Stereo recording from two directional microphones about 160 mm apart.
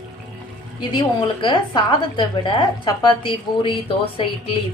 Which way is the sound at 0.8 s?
30° left (ahead or behind).